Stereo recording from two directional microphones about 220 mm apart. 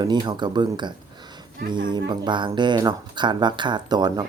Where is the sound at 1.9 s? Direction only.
20° right (ahead or behind).